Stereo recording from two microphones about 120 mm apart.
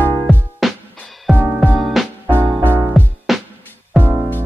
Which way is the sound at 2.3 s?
15° right (ahead or behind).